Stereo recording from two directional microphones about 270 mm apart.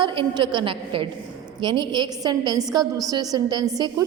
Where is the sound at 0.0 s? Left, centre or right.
Centre.